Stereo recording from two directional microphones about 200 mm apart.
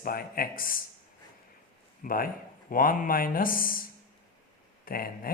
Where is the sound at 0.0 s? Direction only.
45° left (ahead or behind).